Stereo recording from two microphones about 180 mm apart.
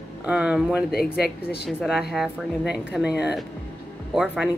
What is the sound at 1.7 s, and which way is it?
A woman's voice, 5° right (ahead or behind).